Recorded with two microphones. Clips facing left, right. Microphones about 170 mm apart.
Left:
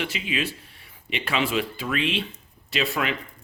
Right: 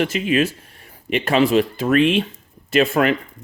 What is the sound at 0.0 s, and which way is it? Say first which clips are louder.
Speech: right 10 dB; 45° right (ahead or behind).